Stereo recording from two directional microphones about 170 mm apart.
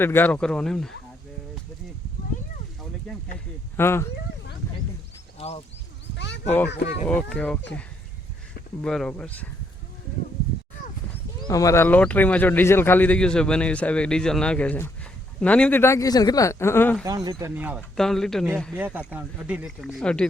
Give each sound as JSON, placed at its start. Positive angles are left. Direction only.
{"t": 0.0, "sound": "speech", "side_deg": 10}
{"t": 3.8, "sound": "speech", "side_deg": 15}
{"t": 5.4, "sound": "a sound", "side_deg": 35}
{"t": 6.1, "sound": "a sound", "side_deg": 90}
{"t": 6.7, "sound": "speech", "side_deg": 90}
{"t": 7.1, "sound": "speech", "side_deg": 5}
{"t": 8.8, "sound": "speech", "side_deg": 5}
{"t": 11.4, "sound": "speech", "side_deg": 20}
{"t": 17.0, "sound": "speech", "side_deg": -20}
{"t": 17.4, "sound": "speech", "side_deg": -10}
{"t": 17.9, "sound": "speech", "side_deg": 0}
{"t": 18.8, "sound": "speech", "side_deg": -10}